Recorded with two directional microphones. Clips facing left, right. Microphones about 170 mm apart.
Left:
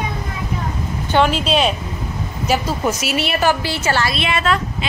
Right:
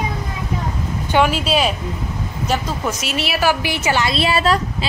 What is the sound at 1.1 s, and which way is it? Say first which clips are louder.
Speech: left 1 dB; 5° right (ahead or behind).